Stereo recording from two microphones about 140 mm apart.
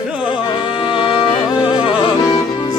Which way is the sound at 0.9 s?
40° left (ahead or behind).